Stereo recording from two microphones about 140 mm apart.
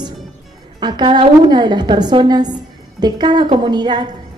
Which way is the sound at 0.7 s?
30° right (ahead or behind).